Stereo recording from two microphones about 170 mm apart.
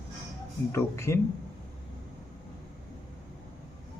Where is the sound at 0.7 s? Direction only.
15° left (ahead or behind).